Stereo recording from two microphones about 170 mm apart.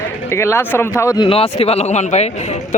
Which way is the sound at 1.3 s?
35° left (ahead or behind).